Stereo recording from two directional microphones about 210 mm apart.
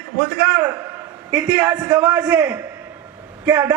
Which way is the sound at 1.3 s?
5° right (ahead or behind).